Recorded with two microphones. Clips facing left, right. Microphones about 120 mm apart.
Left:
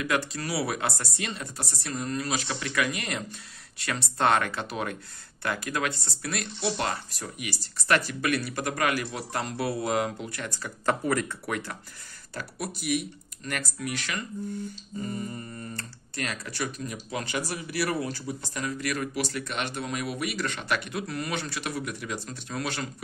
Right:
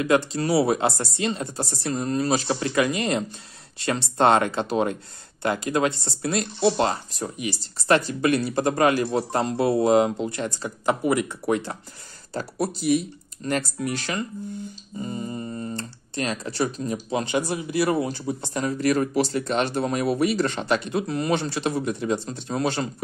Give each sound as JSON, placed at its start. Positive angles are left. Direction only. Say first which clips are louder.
{"t": 0.0, "sound": "speech", "louder": "right 8 dB", "side_deg": -25}
{"t": 15.0, "sound": "speech", "louder": "right 4 dB", "side_deg": -20}